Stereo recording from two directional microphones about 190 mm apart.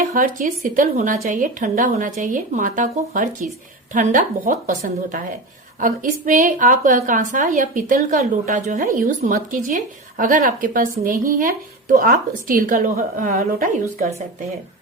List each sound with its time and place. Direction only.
0.1 s a woman's voice: 40° right (ahead or behind)